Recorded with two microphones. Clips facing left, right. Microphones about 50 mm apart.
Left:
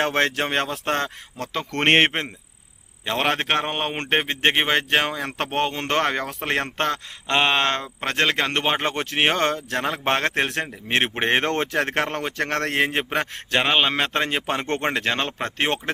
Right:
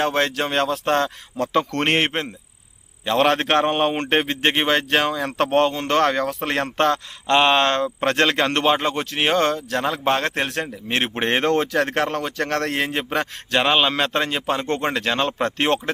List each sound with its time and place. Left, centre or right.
0.0 s speech: left
1.7 s a man's voice: left; by 3.9 s centre
4.1 s speech: centre
7.3 s speech: centre
9.0 s speech: left
13.1 s a man's voice: centre
14.8 s speech: centre